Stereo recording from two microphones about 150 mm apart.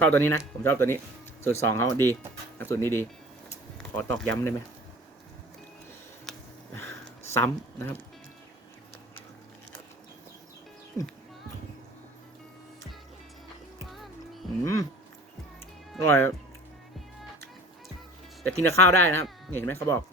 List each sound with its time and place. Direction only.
0.0 s speech: 15° left (ahead or behind)
6.7 s a sound: 15° left (ahead or behind)
13.9 s music: centre (ahead or behind)
14.6 s speech: 20° left (ahead or behind)
16.0 s speech: 15° left (ahead or behind)
18.6 s speech: 15° left (ahead or behind)